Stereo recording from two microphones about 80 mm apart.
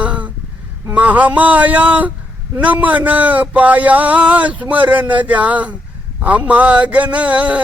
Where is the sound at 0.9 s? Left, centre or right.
Centre.